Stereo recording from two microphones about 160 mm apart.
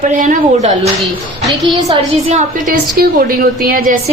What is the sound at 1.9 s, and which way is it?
Speech, 45° right (ahead or behind).